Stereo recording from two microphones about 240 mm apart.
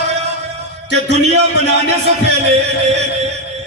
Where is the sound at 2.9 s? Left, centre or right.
Right.